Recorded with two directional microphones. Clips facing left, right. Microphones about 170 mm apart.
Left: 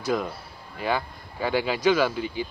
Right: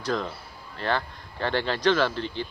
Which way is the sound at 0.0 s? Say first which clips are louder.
Left 2 dB; 10° left (ahead or behind).